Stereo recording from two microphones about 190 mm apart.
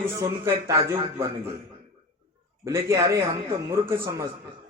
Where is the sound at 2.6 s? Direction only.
15° right (ahead or behind).